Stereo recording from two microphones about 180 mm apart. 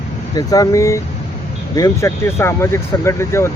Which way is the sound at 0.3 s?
20° left (ahead or behind).